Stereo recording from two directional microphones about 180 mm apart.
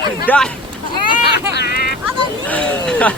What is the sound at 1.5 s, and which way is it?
Speech, 60° left (ahead or behind).